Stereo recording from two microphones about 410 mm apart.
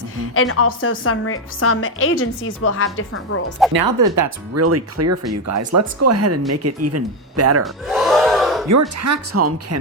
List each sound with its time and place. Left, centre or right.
0.3 s a woman's voice: left
3.7 s speech: right
7.6 s a sound: centre
8.6 s speech: right